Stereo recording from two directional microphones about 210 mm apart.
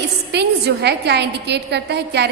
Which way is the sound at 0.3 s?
55° right (ahead or behind).